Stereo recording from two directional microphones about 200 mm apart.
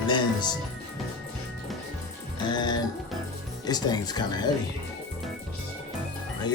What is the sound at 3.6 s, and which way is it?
Speech, 20° left (ahead or behind).